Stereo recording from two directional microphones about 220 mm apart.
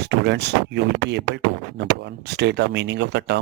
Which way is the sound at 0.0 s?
50° right (ahead or behind).